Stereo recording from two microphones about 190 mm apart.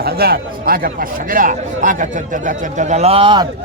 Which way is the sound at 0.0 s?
55° right (ahead or behind).